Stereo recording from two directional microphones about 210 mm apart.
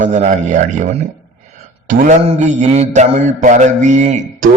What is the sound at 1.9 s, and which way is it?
A man's voice, 35° right (ahead or behind).